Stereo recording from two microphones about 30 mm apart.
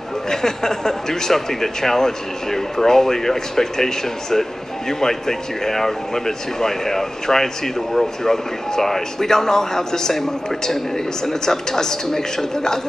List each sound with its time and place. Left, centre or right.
0.3 s speech: centre